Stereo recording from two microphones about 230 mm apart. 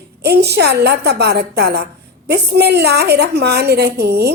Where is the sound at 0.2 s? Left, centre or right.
Right.